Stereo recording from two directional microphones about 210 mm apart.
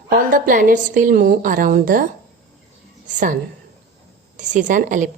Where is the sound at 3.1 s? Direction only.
35° right (ahead or behind).